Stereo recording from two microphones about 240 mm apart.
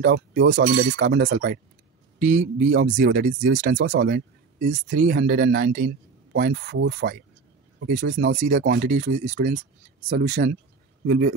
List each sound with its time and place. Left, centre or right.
0.0 s speech: right
0.9 s speech: right